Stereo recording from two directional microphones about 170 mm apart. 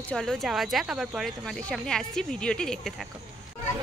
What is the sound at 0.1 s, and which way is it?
Speech, centre (ahead or behind).